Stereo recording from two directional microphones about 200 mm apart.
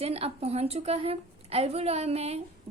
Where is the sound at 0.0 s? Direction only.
30° right (ahead or behind).